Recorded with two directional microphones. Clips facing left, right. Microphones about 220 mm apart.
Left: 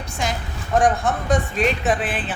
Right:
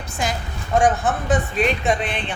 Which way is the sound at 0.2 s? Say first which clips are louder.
Right 1 dB; centre (ahead or behind).